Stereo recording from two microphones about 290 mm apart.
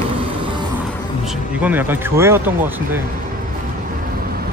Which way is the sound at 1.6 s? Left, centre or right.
Centre.